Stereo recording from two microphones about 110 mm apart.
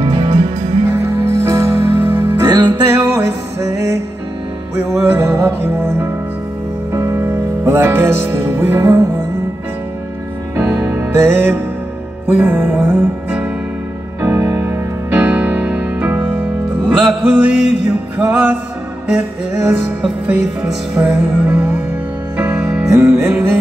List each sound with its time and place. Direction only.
0.0 s music: 60° right (ahead or behind); by 0.7 s 80° right
0.8 s music: 25° right (ahead or behind)
11.0 s music: 25° right (ahead or behind)
14.2 s music: 30° right (ahead or behind)
15.0 s music: 15° right (ahead or behind)